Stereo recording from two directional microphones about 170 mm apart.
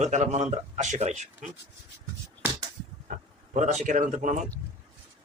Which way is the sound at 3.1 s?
45° right (ahead or behind).